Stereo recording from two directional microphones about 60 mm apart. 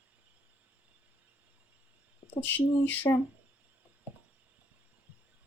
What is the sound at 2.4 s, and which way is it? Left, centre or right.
Speech, left.